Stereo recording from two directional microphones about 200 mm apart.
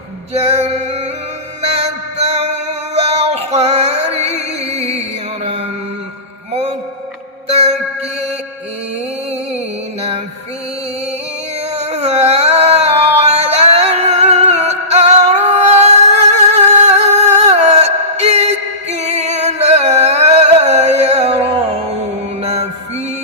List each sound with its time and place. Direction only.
0.3 s male singing: 30° right (ahead or behind)
1.6 s music: 30° right (ahead or behind)
2.9 s child singing: 30° right (ahead or behind)
4.1 s chant: 30° right (ahead or behind)
6.5 s music: 30° right (ahead or behind)
11.8 s a sound: 35° right (ahead or behind)
22.4 s music: 30° right (ahead or behind)